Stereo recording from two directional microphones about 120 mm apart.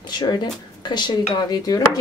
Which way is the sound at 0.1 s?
35° left (ahead or behind).